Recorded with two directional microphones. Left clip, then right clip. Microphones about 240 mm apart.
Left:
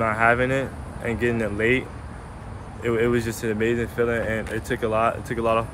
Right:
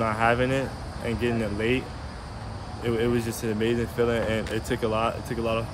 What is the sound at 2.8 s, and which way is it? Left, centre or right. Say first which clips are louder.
Speech: left 4 dB; centre.